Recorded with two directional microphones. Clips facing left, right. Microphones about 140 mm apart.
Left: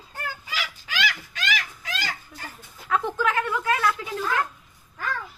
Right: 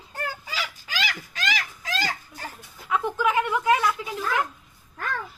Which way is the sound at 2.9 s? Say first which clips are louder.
Right 1 dB; 15° right (ahead or behind).